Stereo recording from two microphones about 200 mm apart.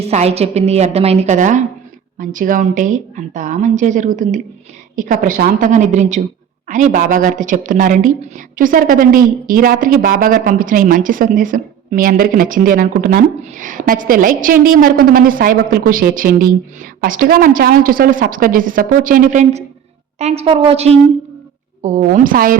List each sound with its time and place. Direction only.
0.0 s a woman's voice: 35° right (ahead or behind)